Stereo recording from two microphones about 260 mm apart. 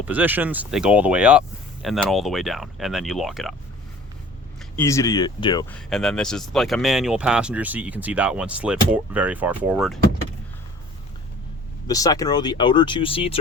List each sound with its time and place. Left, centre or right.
0.0 s speech: centre
4.8 s speech: centre
5.7 s speech: centre
11.9 s speech: centre